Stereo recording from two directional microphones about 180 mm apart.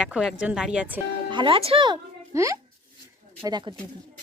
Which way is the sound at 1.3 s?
25° right (ahead or behind).